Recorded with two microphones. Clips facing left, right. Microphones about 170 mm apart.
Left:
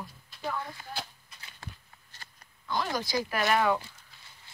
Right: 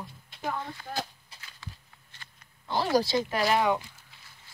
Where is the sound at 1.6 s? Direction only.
50° left (ahead or behind).